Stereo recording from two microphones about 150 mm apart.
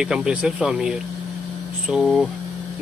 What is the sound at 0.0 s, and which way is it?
Speech, 5° right (ahead or behind).